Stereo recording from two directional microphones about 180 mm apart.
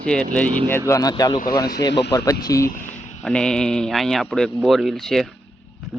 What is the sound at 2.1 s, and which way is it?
Speech, 20° left (ahead or behind).